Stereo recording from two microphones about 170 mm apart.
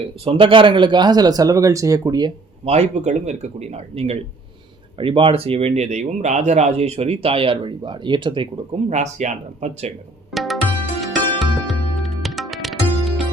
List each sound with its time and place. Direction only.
0.3 s a man's voice: 30° right (ahead or behind)
2.6 s speech: 40° right (ahead or behind)
8.9 s speech: 45° right (ahead or behind)
10.3 s music: centre (ahead or behind)